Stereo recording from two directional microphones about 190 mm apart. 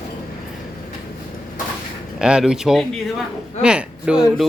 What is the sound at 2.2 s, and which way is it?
Speech, 5° right (ahead or behind).